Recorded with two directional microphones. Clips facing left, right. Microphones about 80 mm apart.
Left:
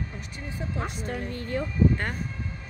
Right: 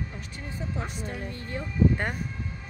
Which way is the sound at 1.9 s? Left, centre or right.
Centre.